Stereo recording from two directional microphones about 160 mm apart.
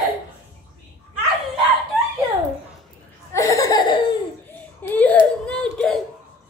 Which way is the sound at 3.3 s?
20° left (ahead or behind).